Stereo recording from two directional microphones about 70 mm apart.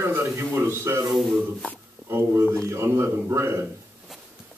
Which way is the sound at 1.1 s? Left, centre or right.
Centre.